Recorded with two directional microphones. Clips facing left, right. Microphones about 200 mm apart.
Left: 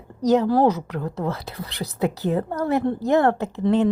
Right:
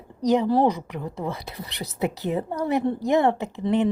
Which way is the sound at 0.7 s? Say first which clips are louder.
Left 4 dB; 15° right (ahead or behind).